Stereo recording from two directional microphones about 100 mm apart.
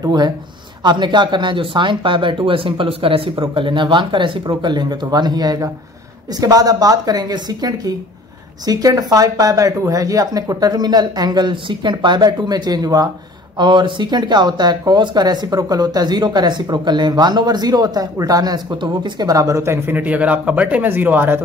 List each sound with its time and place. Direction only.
0.0 s speech: 40° right (ahead or behind)
13.6 s speech: 50° right (ahead or behind); by 21.4 s 20° right (ahead or behind)